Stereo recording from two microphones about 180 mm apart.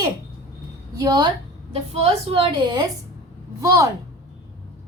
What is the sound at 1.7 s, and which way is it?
A woman's voice, 35° right (ahead or behind).